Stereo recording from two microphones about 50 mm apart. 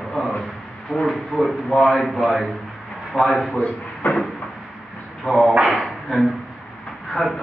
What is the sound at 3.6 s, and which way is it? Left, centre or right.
Drawer open or close, left.